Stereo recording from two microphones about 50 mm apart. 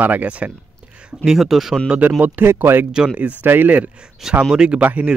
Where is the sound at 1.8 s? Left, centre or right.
Right.